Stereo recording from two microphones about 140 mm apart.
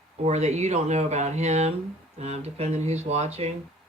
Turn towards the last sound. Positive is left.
turn(degrees=-50)  # may be behind; listen again after turning